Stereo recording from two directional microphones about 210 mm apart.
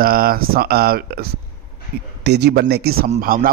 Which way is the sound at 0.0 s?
45° right (ahead or behind).